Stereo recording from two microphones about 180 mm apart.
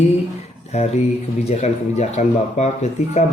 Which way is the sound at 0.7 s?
35° left (ahead or behind).